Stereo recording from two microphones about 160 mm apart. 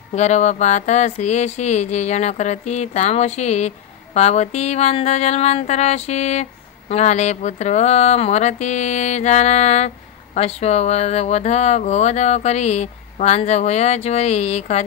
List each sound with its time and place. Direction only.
0.1 s speech: 45° left (ahead or behind)